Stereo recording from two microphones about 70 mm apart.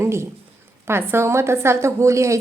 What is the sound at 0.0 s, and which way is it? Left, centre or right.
A woman's voice, right.